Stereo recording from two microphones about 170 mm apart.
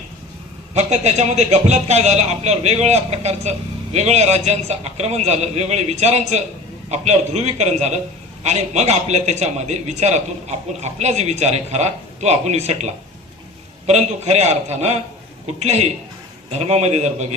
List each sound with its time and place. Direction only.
0.7 s a man's voice: 40° right (ahead or behind)